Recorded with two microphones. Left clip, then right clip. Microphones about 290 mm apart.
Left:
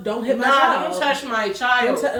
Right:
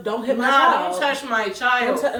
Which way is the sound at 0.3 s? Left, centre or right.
Centre.